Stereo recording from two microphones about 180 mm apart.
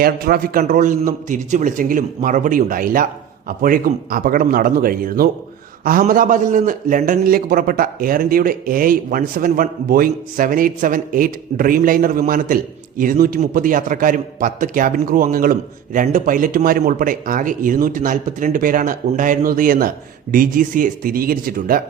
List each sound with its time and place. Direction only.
0.0 s a man's voice: 55° right (ahead or behind)